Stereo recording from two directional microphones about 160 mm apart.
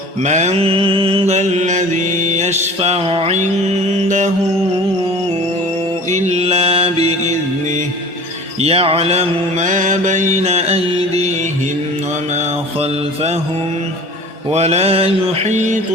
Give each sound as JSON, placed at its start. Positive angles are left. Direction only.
{"t": 0.2, "sound": "mantra", "side_deg": -45}
{"t": 6.1, "sound": "mantra", "side_deg": -45}
{"t": 8.6, "sound": "mantra", "side_deg": -40}
{"t": 14.5, "sound": "mantra", "side_deg": -40}